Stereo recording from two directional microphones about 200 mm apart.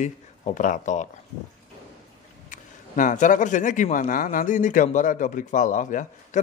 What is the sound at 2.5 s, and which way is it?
Speech, 40° left (ahead or behind).